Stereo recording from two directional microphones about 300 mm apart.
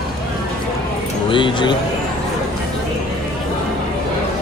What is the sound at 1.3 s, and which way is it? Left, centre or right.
Speech, centre.